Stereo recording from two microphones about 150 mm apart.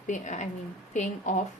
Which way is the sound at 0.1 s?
55° left (ahead or behind).